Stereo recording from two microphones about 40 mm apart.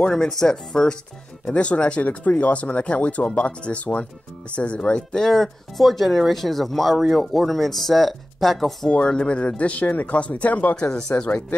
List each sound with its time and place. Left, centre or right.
0.0 s speech: left
0.3 s speech: centre
1.5 s speech: left
5.2 s speech: centre
8.8 s speech: left
10.8 s speech: centre
11.1 s speech: left